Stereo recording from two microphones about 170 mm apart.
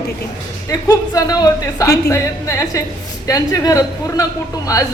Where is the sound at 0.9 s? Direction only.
20° left (ahead or behind).